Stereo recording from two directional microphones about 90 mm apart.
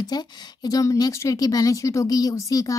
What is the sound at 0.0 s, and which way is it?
A woman's voice, 50° left (ahead or behind).